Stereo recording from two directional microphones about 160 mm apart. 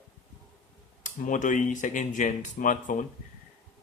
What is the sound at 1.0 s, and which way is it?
Speech, 55° left (ahead or behind).